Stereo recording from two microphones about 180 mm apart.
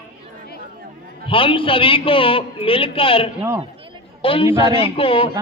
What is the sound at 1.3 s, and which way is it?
A man's voice, 30° left (ahead or behind).